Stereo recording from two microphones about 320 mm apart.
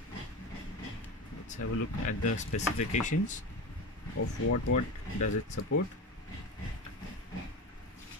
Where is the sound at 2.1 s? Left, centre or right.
Left.